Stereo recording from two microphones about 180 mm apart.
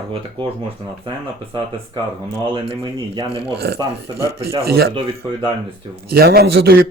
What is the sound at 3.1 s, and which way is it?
Speech, 30° right (ahead or behind).